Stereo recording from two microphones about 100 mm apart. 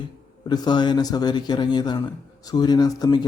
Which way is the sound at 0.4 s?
45° left (ahead or behind).